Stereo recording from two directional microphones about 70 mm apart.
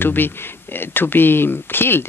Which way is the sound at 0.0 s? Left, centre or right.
Left.